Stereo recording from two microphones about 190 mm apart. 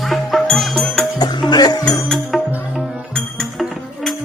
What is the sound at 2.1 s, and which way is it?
Music, centre (ahead or behind).